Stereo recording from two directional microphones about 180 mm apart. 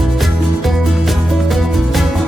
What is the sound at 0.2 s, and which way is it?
Music, centre (ahead or behind).